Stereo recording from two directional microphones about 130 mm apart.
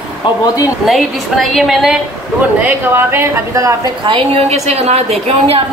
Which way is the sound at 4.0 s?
40° right (ahead or behind).